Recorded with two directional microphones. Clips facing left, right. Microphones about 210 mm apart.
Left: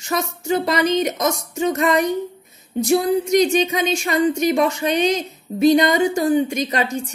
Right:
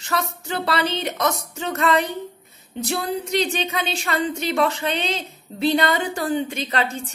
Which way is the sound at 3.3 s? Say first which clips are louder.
Left 7 dB; 15° left (ahead or behind).